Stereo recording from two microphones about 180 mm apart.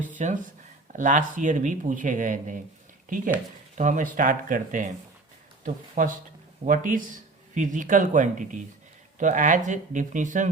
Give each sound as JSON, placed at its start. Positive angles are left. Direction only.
{"t": 0.2, "sound": "speech", "side_deg": -40}
{"t": 3.8, "sound": "speech", "side_deg": -45}